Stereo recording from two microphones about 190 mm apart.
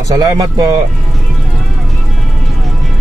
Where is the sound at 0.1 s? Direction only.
20° right (ahead or behind).